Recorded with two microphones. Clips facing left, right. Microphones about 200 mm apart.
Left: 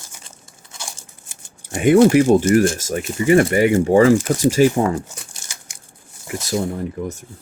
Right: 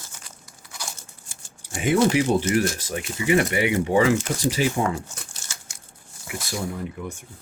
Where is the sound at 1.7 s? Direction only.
55° left (ahead or behind).